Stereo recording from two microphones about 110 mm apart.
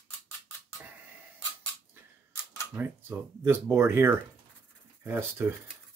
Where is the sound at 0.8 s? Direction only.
15° right (ahead or behind).